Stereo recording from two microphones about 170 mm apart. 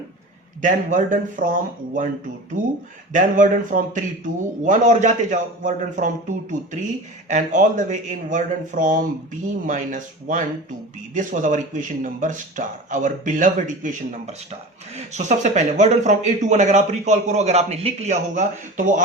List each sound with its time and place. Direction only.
0.6 s speech: 50° right (ahead or behind)